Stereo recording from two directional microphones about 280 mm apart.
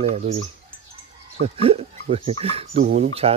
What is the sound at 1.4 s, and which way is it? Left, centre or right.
Speech, right.